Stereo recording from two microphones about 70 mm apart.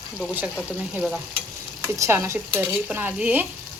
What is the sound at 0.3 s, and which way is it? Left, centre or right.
Speech, right.